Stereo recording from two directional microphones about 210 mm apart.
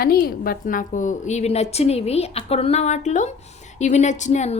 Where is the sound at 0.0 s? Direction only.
45° left (ahead or behind).